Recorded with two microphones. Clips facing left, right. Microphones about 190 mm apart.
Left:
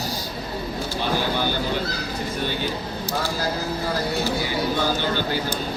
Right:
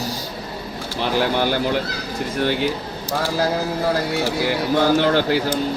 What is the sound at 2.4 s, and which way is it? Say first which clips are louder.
Speech: right 8 dB; 80° right.